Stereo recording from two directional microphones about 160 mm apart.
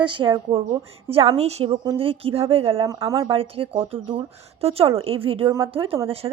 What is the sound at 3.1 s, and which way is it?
A woman's voice, 35° right (ahead or behind).